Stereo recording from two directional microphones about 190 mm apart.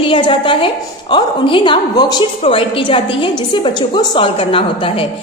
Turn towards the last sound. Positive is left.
turn(degrees=30)  # may be behind; listen again after turning